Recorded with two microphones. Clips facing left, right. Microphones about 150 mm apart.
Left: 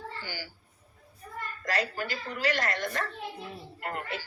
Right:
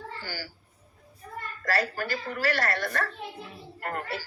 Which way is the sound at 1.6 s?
20° left (ahead or behind).